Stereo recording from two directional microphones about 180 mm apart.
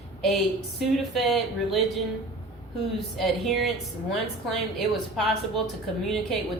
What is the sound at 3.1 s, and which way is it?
A woman's voice, centre (ahead or behind).